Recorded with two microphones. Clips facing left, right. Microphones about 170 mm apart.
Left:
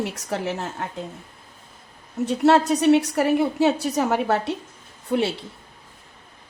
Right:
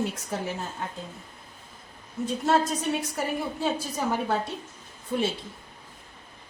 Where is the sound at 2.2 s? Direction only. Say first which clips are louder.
Left 7 dB; 75° left (ahead or behind).